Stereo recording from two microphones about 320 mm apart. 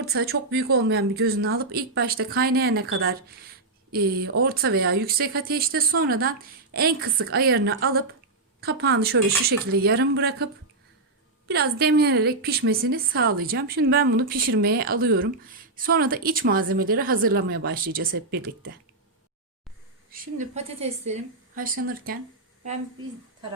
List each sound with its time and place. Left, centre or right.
0.0 s a woman's voice: right
20.1 s a woman's voice: right